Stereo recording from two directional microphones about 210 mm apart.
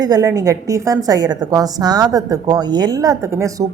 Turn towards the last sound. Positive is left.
turn(degrees=-15)  # may be behind; listen again after turning